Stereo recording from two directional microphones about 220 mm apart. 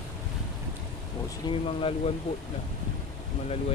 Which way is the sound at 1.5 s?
25° left (ahead or behind).